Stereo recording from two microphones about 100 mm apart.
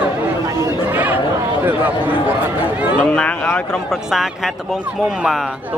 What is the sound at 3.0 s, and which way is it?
Speech, 10° left (ahead or behind).